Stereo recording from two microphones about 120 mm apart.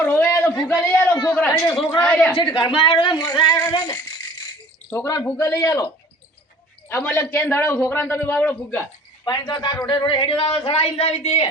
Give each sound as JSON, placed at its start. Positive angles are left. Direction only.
{"t": 0.0, "sound": "a sound", "side_deg": 15}
{"t": 0.7, "sound": "a man's voice", "side_deg": 15}
{"t": 2.3, "sound": "a woman's voice", "side_deg": 40}
{"t": 9.2, "sound": "a man's voice", "side_deg": 35}